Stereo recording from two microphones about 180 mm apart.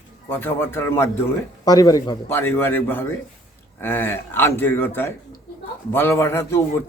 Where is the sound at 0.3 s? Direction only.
10° left (ahead or behind).